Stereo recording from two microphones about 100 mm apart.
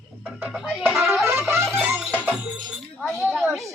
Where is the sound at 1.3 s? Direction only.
25° right (ahead or behind).